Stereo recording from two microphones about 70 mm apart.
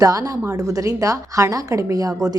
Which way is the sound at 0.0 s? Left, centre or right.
Right.